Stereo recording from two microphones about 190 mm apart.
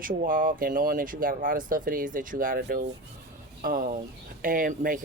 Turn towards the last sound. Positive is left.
turn(degrees=-45)  # may be behind; listen again after turning